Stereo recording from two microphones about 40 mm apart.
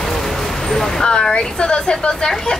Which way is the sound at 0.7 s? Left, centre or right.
Centre.